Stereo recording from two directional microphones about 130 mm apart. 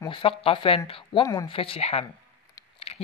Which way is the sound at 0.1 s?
45° left (ahead or behind).